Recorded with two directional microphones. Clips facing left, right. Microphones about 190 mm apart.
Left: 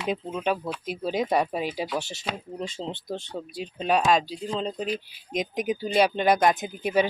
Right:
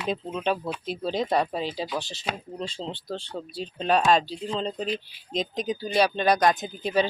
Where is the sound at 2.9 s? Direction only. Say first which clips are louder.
Left 1 dB; 20° left (ahead or behind).